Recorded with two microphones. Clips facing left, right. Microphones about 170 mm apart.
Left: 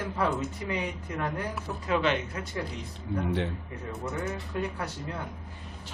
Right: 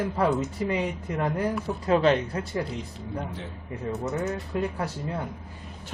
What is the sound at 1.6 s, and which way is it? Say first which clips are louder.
Speech: right 5 dB; 35° right (ahead or behind).